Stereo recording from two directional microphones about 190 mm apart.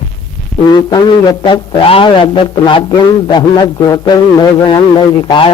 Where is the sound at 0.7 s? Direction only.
20° left (ahead or behind).